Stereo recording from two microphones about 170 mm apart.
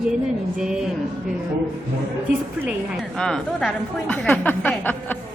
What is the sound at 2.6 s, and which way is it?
A woman's voice, centre (ahead or behind).